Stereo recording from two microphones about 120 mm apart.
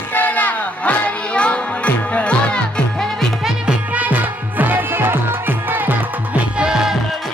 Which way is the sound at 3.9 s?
15° right (ahead or behind).